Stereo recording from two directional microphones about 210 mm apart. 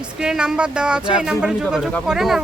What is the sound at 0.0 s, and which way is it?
Speech, 5° right (ahead or behind).